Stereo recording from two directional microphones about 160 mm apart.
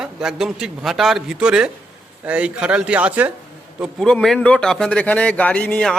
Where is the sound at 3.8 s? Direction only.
Centre (ahead or behind).